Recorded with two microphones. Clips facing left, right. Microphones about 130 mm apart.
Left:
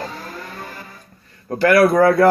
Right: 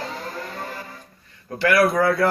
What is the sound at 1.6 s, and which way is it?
Speech, 40° left (ahead or behind).